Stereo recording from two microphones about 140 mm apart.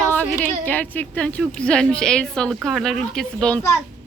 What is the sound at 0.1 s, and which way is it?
A woman's voice, 10° left (ahead or behind).